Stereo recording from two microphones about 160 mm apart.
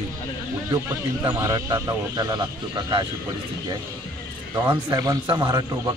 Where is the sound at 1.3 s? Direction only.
20° right (ahead or behind).